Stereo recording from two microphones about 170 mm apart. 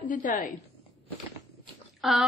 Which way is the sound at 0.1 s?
50° left (ahead or behind).